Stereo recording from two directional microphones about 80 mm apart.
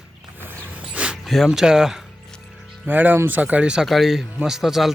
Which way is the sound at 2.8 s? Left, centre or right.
Right.